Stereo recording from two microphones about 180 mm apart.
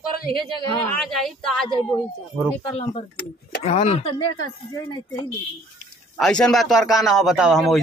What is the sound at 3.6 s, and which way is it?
Speech, 35° left (ahead or behind).